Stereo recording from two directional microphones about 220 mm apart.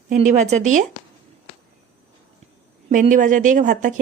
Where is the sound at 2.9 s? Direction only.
35° right (ahead or behind).